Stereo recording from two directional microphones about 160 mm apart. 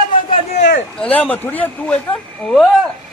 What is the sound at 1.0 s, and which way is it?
Speech, 10° left (ahead or behind).